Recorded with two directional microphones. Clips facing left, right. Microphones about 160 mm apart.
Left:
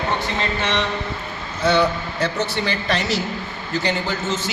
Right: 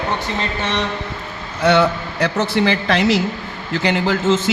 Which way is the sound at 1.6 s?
80° right.